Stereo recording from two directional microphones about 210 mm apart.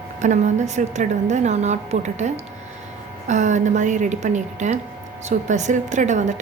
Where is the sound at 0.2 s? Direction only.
35° right (ahead or behind).